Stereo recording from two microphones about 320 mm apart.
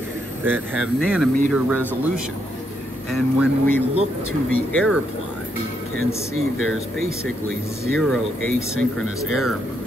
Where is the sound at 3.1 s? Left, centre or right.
Centre.